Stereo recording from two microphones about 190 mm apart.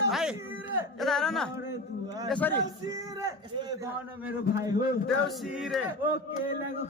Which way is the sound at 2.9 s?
20° right (ahead or behind).